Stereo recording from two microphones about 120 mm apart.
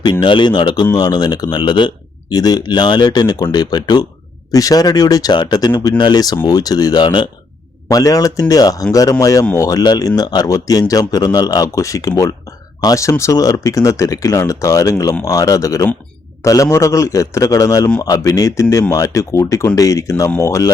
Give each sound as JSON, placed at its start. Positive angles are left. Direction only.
{"t": 0.0, "sound": "speech", "side_deg": 40}
{"t": 7.9, "sound": "speech", "side_deg": 30}